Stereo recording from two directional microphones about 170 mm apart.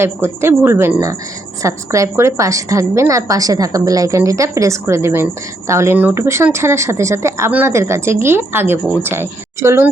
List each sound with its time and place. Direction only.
0.0 s a woman's voice: 15° right (ahead or behind)